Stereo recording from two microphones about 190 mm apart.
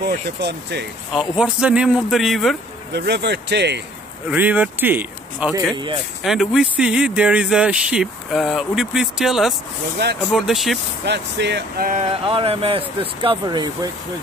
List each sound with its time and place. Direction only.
0.0 s speech: 60° right (ahead or behind)
1.1 s speech: 5° right (ahead or behind)
2.9 s speech: 65° right (ahead or behind)
4.3 s speech: 10° right (ahead or behind)
10.0 s speech: 60° right (ahead or behind)
10.3 s speech: centre (ahead or behind)
11.1 s speech: 65° right (ahead or behind)
12.3 s speech: 30° right (ahead or behind)